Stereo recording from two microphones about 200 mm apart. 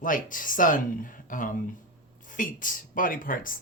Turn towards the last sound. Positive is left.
turn(degrees=45)  # may be behind; listen again after turning